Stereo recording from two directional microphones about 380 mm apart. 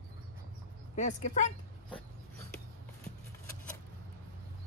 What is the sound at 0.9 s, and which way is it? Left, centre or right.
Speech, centre.